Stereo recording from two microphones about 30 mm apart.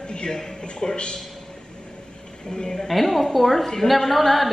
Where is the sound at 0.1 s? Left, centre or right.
Left.